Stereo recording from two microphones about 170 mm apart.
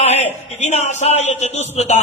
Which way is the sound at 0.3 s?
40° left (ahead or behind).